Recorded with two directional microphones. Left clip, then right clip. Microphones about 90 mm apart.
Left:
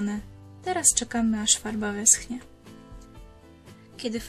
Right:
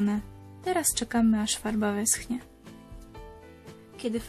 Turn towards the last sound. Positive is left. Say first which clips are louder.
# even
turn(degrees=-60)  # may be behind; listen again after turning